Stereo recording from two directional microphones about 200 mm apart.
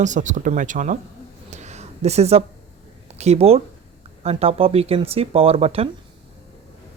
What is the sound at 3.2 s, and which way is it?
Speech, 30° right (ahead or behind).